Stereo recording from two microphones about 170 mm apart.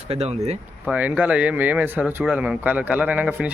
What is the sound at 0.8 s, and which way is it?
Speech, 5° right (ahead or behind).